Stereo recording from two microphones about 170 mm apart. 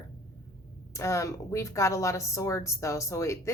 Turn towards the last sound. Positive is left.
turn(degrees=15)  # may be behind; listen again after turning